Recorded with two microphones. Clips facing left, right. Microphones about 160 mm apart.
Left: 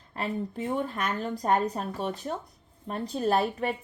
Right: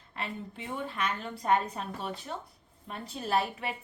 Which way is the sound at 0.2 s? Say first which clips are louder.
Left 8 dB; 40° left (ahead or behind).